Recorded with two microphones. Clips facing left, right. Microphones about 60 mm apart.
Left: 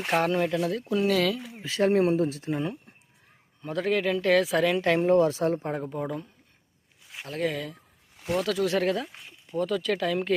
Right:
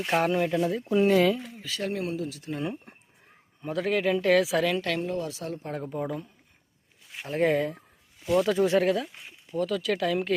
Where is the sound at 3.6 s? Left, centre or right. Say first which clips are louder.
Even; centre.